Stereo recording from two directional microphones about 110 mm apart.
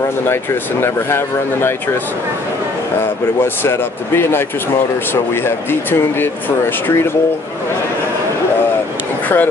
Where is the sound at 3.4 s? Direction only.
20° left (ahead or behind).